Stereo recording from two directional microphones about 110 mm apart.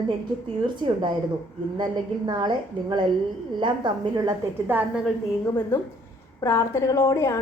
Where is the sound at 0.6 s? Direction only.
45° right (ahead or behind).